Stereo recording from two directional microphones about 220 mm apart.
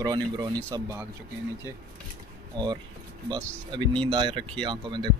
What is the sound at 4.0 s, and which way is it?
Speech, 20° right (ahead or behind).